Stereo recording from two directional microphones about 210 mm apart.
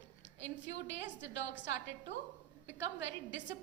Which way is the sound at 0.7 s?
60° left (ahead or behind).